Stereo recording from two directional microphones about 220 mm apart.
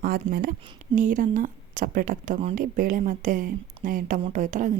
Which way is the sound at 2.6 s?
40° right (ahead or behind).